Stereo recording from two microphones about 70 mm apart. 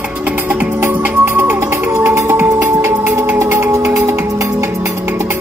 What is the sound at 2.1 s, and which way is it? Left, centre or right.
Music, right.